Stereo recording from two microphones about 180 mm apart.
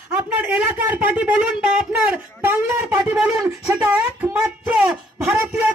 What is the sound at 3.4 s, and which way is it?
Speech, 20° right (ahead or behind).